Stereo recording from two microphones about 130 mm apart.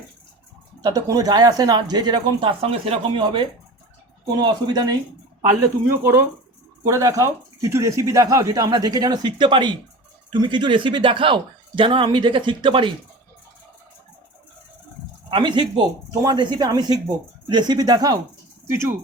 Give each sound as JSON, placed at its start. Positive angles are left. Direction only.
{"t": 0.8, "sound": "speech", "side_deg": -30}
{"t": 5.5, "sound": "speech", "side_deg": -20}
{"t": 15.3, "sound": "speech", "side_deg": -35}
{"t": 18.7, "sound": "speech", "side_deg": -20}